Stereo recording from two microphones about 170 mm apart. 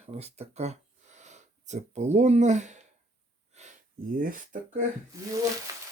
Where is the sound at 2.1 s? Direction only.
40° right (ahead or behind).